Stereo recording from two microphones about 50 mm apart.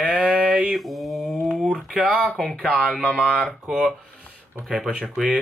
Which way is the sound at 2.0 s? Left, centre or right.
Centre.